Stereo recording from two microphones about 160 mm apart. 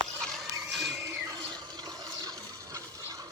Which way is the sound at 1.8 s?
25° right (ahead or behind).